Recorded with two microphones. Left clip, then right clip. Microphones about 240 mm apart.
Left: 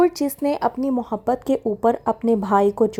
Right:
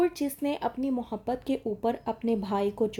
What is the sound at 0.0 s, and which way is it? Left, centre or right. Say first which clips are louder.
Speech: left 9 dB; left.